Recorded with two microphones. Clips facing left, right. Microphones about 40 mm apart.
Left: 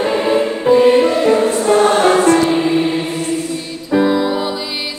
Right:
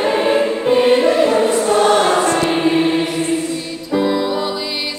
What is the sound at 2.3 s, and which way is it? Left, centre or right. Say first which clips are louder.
Choir: left 2 dB; right.